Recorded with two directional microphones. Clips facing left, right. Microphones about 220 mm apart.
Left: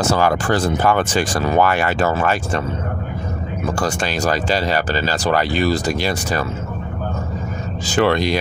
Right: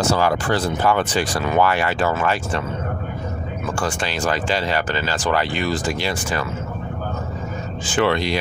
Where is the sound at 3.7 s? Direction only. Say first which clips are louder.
Left 2 dB; 40° left (ahead or behind).